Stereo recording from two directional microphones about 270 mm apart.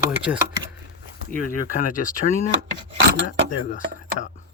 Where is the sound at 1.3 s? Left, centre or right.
Left.